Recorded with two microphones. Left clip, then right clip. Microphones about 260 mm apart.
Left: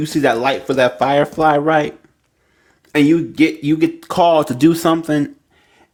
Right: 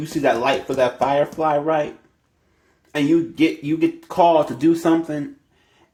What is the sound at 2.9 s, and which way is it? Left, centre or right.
Speech, left.